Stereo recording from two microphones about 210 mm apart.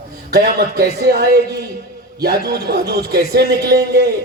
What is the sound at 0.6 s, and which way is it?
A man's voice, 50° right (ahead or behind).